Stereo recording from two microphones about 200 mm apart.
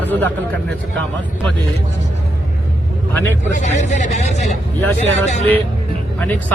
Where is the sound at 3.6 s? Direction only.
35° left (ahead or behind).